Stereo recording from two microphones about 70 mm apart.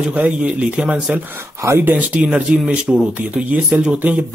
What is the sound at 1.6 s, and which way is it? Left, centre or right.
Speech, right.